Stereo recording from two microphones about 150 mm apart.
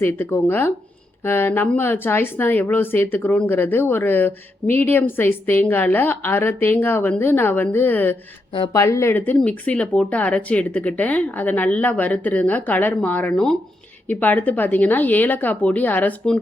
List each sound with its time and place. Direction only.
0.0 s speech: 15° left (ahead or behind)